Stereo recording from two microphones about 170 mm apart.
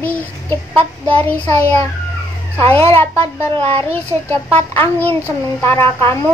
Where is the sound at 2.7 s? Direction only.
15° left (ahead or behind).